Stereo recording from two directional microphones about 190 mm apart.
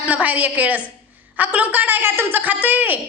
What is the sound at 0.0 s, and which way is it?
A woman's voice, 10° right (ahead or behind).